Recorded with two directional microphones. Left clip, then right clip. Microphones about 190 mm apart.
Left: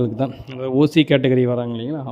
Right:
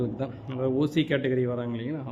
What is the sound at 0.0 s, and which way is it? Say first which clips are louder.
A man's voice: left 9 dB; 35° left (ahead or behind).